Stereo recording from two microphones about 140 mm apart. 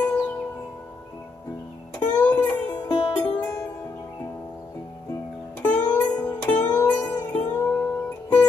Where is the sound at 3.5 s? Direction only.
25° left (ahead or behind).